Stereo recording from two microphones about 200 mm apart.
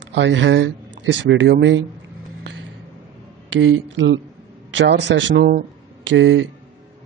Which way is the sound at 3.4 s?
70° right (ahead or behind).